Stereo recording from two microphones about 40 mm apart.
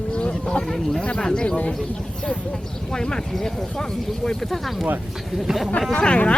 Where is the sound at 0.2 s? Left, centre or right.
Left.